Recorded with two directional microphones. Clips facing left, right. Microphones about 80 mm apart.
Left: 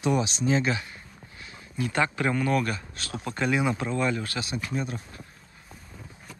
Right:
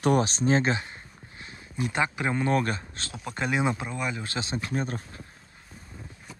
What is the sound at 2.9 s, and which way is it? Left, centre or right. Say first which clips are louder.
Speech: left 3 dB; right.